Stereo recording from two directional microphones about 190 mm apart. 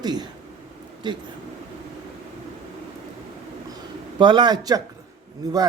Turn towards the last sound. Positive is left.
turn(degrees=-20)  # may be behind; listen again after turning